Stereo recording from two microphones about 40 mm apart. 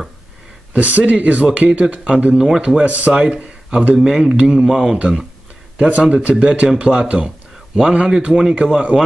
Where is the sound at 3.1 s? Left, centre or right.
Right.